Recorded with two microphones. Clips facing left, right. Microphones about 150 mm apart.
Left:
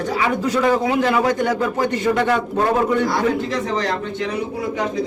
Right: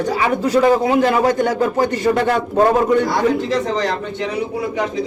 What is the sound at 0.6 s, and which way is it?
Speech, 40° right (ahead or behind).